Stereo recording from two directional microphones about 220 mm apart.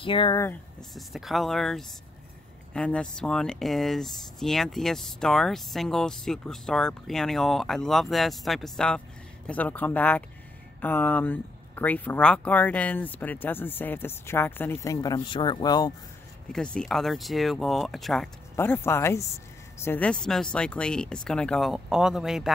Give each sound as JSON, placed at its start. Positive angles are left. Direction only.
{"t": 0.0, "sound": "speech", "side_deg": 20}
{"t": 0.9, "sound": "speech", "side_deg": 0}
{"t": 16.5, "sound": "speech", "side_deg": 5}